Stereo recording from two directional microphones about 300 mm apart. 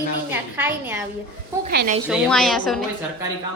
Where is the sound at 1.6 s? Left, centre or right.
Right.